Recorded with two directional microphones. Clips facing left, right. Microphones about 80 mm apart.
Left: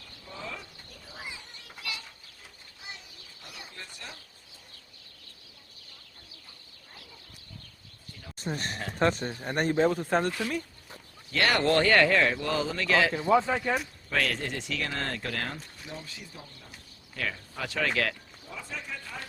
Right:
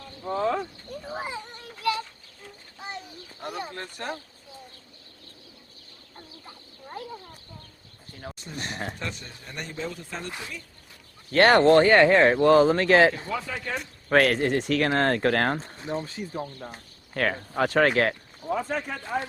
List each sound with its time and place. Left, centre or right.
0.0 s a sound: right
6.1 s chicken: right
8.1 s speech: right
8.4 s speech: left
8.7 s speech: right
9.0 s speech: left
11.3 s speech: right
11.6 s speech: right
12.3 s speech: right
13.3 s speech: left
14.1 s speech: right
15.5 s speech: right
17.9 s speech: right
18.4 s a man's voice: right